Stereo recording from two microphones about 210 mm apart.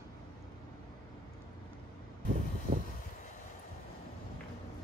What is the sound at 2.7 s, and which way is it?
Vehicle, 40° right (ahead or behind).